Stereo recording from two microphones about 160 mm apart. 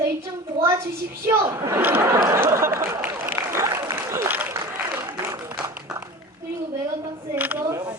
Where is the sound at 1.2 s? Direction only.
15° right (ahead or behind).